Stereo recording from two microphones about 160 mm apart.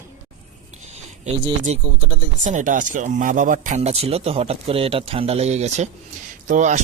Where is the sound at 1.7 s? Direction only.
45° right (ahead or behind).